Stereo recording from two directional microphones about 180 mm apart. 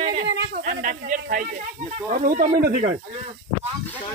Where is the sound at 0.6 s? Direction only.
50° right (ahead or behind).